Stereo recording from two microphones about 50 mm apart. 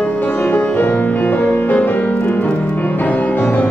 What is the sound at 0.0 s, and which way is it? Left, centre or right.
Music, left.